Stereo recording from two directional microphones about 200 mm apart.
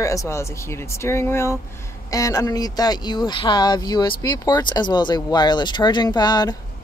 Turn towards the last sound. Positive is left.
turn(degrees=20)  # may be behind; listen again after turning